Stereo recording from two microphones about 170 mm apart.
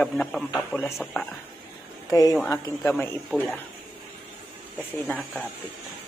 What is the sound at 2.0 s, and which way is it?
A man's voice, 20° left (ahead or behind).